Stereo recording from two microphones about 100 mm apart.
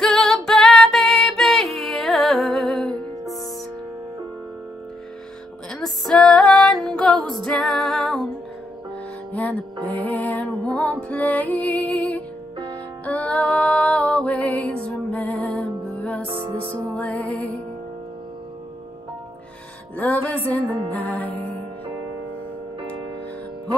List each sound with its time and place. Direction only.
0.0 s female singing: 5° left (ahead or behind)
5.7 s music: 5° left (ahead or behind)
9.3 s music: 15° left (ahead or behind)
16.3 s music: 60° right (ahead or behind)
16.8 s music: 15° left (ahead or behind)
20.0 s music: 15° left (ahead or behind)